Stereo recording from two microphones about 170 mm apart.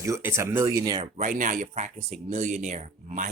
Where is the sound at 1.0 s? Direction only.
45° right (ahead or behind).